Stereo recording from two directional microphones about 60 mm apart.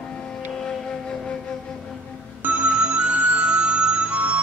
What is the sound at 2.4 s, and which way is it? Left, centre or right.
Music, right.